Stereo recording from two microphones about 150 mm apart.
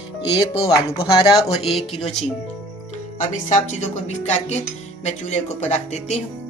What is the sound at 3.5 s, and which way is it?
Speech, 50° left (ahead or behind).